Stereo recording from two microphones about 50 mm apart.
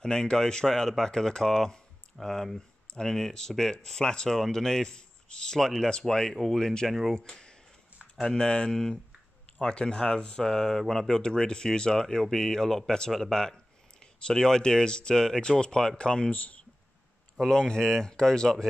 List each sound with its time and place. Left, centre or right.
0.0 s speech: centre
6.3 s speech: centre
7.2 s a sound: centre
8.2 s speech: centre; by 16.6 s left
17.4 s speech: centre